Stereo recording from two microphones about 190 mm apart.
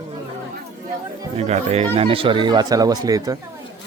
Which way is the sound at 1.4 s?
35° right (ahead or behind).